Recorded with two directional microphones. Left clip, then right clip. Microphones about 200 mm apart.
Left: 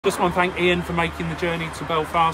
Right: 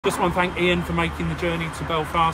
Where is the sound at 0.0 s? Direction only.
20° left (ahead or behind).